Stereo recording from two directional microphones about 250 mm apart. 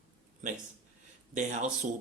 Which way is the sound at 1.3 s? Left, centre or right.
Right.